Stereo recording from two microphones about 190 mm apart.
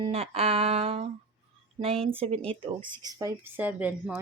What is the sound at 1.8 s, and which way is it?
Speech, 30° right (ahead or behind).